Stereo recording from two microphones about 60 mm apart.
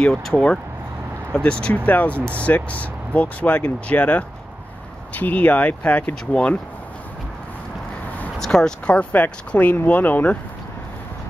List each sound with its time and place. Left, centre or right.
0.0 s speech: centre
1.9 s speech: left
8.4 s speech: centre; by 10.3 s left